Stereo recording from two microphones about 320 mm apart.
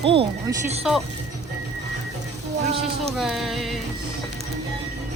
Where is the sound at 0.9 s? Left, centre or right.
Centre.